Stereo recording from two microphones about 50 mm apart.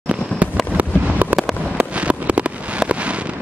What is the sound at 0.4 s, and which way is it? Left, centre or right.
Fireworks, right.